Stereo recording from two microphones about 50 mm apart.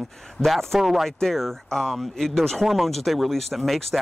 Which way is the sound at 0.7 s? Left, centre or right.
Centre.